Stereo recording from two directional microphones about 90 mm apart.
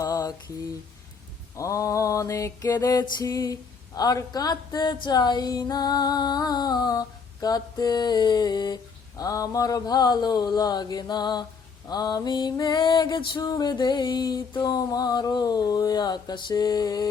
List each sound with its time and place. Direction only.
0.0 s mantra: 40° left (ahead or behind)
1.5 s mantra: 35° left (ahead or behind)